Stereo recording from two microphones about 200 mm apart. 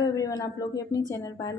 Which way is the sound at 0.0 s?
20° left (ahead or behind).